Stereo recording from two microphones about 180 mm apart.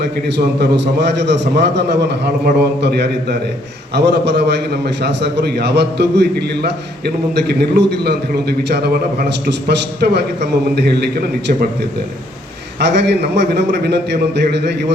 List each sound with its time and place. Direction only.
0.0 s a man's voice: 70° right (ahead or behind)
12.8 s a man's voice: 70° right (ahead or behind)